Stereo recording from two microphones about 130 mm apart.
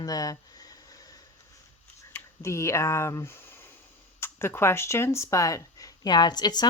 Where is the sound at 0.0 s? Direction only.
30° left (ahead or behind).